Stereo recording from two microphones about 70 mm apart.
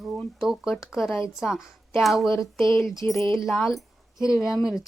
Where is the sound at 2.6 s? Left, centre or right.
Left.